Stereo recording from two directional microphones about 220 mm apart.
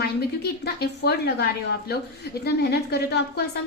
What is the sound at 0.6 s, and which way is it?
A woman's voice, 45° left (ahead or behind).